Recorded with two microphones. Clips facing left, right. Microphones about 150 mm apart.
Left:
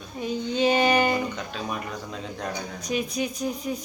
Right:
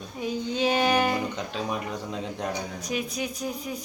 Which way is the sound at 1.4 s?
20° right (ahead or behind).